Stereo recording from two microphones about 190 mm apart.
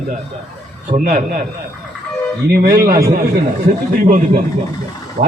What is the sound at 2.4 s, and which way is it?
Speech, 55° right (ahead or behind).